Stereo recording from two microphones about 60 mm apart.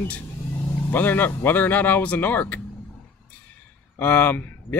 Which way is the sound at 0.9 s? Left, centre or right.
Left.